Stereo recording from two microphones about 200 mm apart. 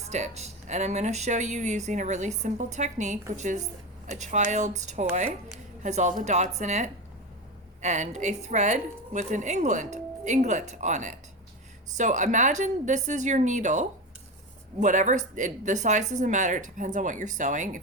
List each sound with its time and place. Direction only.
0.1 s speech: 35° right (ahead or behind)